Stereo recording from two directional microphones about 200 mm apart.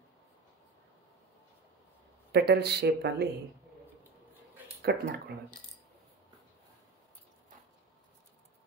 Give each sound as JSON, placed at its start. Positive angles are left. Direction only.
{"t": 2.3, "sound": "speech", "side_deg": -55}
{"t": 4.9, "sound": "speech", "side_deg": -55}